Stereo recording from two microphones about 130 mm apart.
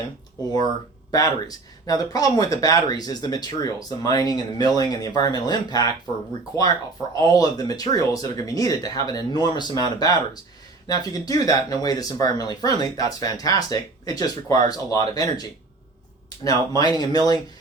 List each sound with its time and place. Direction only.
1.1 s speech: 30° left (ahead or behind)
7.2 s speech: 30° left (ahead or behind)